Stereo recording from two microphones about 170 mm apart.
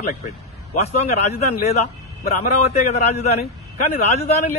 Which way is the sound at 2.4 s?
40° left (ahead or behind).